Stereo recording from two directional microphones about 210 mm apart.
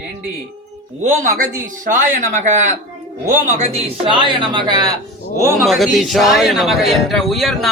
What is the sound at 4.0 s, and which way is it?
Speech, 25° right (ahead or behind).